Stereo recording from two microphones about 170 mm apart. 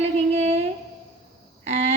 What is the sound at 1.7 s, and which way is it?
Speech, 40° right (ahead or behind).